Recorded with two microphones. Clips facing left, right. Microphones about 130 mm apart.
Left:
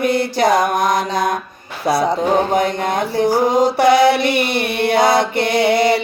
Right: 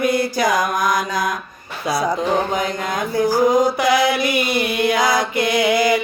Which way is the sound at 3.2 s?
25° left (ahead or behind).